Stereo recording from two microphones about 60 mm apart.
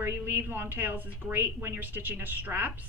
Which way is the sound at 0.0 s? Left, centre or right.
Right.